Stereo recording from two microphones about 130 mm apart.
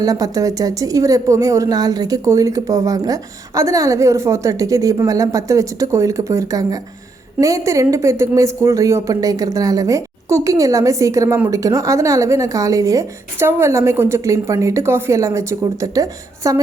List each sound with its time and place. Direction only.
0.0 s a woman's voice: 25° right (ahead or behind)